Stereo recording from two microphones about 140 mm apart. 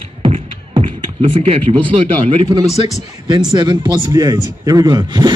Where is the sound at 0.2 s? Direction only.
40° right (ahead or behind).